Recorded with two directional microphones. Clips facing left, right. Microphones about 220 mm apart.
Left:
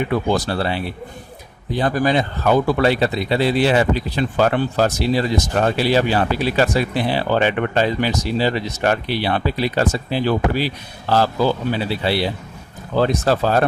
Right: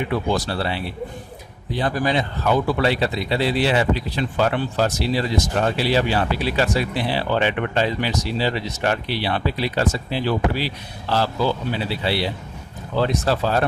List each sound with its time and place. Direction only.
0.1 s speech: 50° left (ahead or behind)